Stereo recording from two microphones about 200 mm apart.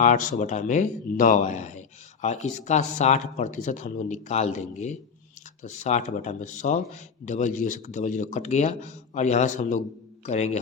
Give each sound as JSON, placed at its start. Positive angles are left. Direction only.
{"t": 0.0, "sound": "speech", "side_deg": 40}